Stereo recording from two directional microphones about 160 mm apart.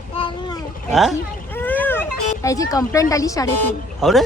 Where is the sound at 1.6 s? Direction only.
10° left (ahead or behind).